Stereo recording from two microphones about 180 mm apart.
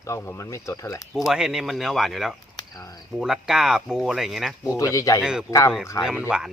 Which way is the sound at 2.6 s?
20° left (ahead or behind).